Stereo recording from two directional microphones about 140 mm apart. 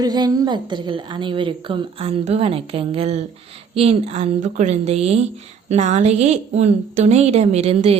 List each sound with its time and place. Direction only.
0.0 s a woman's voice: 30° right (ahead or behind); by 7.9 s 50° right (ahead or behind)